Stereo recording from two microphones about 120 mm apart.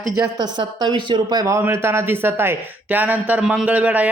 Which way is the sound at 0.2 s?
35° right (ahead or behind).